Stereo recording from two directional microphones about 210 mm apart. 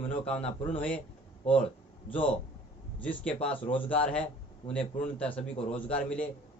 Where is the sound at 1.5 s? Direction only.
25° left (ahead or behind).